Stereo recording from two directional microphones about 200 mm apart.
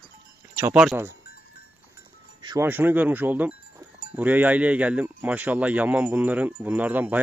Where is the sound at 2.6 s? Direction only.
10° right (ahead or behind).